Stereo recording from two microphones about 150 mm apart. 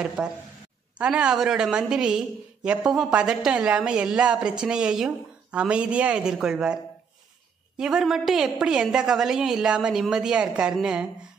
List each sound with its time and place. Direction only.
0.0 s a woman's voice: 5° right (ahead or behind)